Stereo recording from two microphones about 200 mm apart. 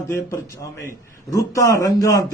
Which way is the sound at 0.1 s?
15° left (ahead or behind).